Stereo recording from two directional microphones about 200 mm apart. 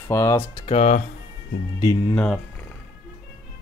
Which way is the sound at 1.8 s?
15° left (ahead or behind).